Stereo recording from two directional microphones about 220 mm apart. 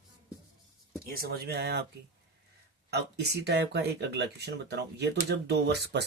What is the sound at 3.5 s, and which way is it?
Speech, 50° right (ahead or behind).